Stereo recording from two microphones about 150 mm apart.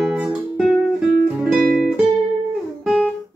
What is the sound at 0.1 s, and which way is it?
Music, centre (ahead or behind).